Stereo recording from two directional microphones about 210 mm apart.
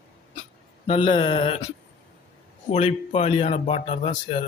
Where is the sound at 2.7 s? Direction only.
30° left (ahead or behind).